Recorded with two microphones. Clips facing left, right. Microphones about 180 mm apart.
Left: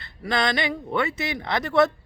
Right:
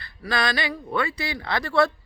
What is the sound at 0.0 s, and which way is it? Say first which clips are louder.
Speech: left 1 dB; 20° left (ahead or behind).